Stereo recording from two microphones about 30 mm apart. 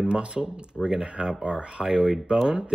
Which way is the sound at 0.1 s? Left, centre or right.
Right.